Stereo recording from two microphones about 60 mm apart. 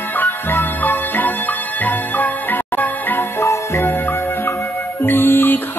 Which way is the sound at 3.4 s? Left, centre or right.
Left.